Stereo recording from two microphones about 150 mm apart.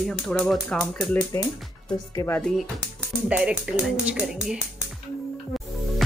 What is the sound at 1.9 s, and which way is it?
Speech, 20° left (ahead or behind).